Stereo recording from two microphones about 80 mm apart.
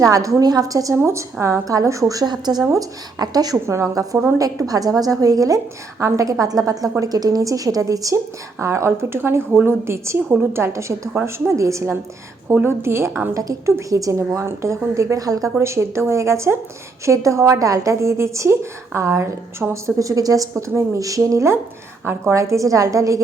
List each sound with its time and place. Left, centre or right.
0.0 s speech: right
0.9 s a woman's voice: right
2.2 s a woman's voice: right
15.5 s a woman's voice: right